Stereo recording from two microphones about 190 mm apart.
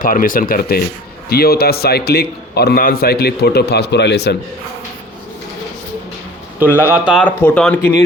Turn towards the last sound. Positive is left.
turn(degrees=5)  # may be behind; listen again after turning